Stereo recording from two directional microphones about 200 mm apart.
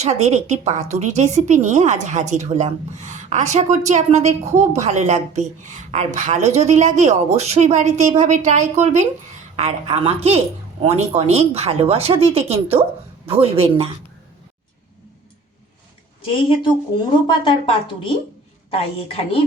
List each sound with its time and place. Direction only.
0.0 s a woman's voice: 35° right (ahead or behind)
17.2 s speech: 25° left (ahead or behind)